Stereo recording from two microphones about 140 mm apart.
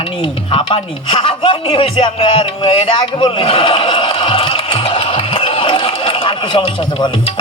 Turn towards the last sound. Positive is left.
turn(degrees=30)  # may be behind; listen again after turning